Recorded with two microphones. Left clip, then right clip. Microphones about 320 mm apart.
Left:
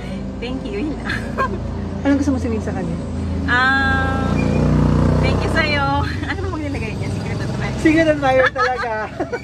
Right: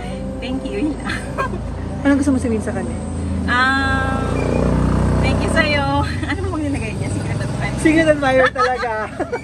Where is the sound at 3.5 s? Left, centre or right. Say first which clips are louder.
Even; centre.